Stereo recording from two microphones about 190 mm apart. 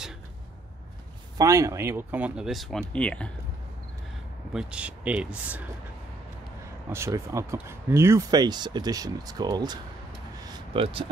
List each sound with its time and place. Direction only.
1.4 s speech: 15° right (ahead or behind); by 3.3 s 5° left (ahead or behind)
4.6 s speech: 5° right (ahead or behind)
6.9 s speech: 15° right (ahead or behind)
10.5 s vehicle: 30° right (ahead or behind)